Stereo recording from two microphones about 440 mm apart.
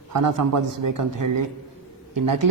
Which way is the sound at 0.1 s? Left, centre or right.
Right.